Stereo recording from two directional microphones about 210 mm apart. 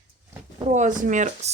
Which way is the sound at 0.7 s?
35° right (ahead or behind).